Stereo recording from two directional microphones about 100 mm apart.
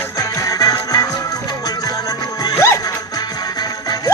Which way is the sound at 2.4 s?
40° left (ahead or behind).